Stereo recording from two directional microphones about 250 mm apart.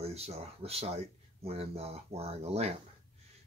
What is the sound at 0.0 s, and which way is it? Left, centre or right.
Speech, right.